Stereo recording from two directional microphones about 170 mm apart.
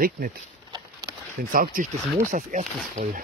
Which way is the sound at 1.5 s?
55° right (ahead or behind).